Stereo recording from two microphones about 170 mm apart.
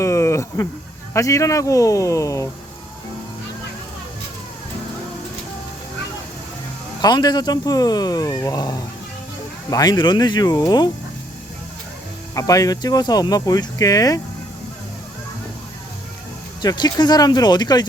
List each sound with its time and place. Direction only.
0.0 s speech: 15° left (ahead or behind)
7.0 s speech: 25° left (ahead or behind)
12.3 s speech: 20° left (ahead or behind)
16.6 s speech: 25° left (ahead or behind)